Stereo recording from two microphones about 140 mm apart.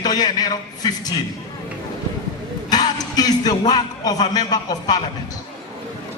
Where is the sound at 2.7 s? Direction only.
30° left (ahead or behind).